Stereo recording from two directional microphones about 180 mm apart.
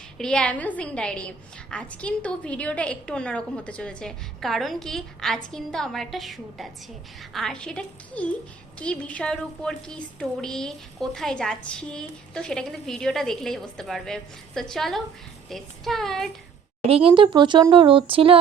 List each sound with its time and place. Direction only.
0.2 s a woman's voice: 5° left (ahead or behind)
16.9 s speech: 30° right (ahead or behind)